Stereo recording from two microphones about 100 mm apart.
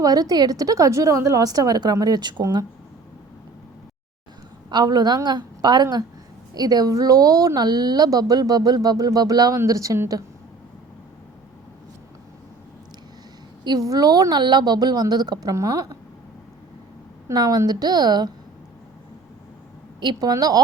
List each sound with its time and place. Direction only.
0.0 s speech: 35° right (ahead or behind)
4.7 s a woman's voice: 45° right (ahead or behind)
13.7 s a woman's voice: 40° right (ahead or behind)
15.5 s speech: 35° right (ahead or behind)
17.2 s a woman's voice: 40° right (ahead or behind)
20.0 s a woman's voice: 50° right (ahead or behind)